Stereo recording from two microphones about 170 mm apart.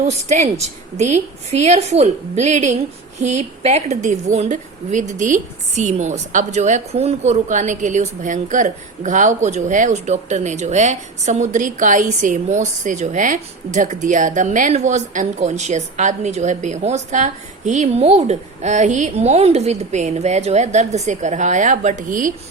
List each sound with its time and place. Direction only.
0.0 s a woman's voice: 45° right (ahead or behind)